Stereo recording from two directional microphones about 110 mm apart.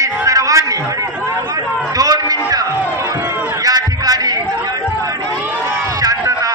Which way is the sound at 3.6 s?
35° right (ahead or behind).